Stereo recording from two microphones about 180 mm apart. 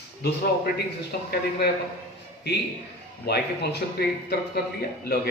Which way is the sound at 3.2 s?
65° left (ahead or behind).